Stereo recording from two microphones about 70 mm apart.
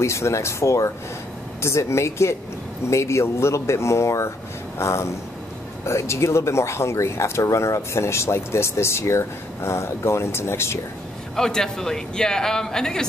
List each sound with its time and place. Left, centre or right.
0.0 s speech: left
11.3 s speech: centre